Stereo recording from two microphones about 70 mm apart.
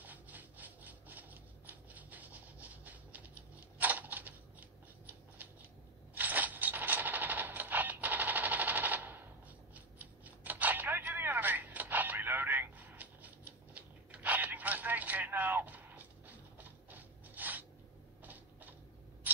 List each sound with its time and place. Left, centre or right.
0.0 s rub: right
3.7 s scissors: right
6.1 s a sound: right